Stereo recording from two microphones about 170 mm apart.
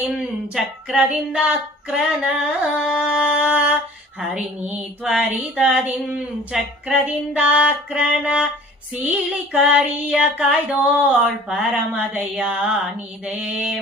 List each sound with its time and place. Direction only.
0.2 s female singing: 5° right (ahead or behind)
3.0 s a sound: 5° right (ahead or behind)
13.2 s female singing: 5° right (ahead or behind)